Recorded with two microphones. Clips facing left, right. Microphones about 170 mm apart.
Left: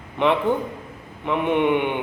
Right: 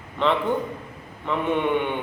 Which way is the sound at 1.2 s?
15° left (ahead or behind).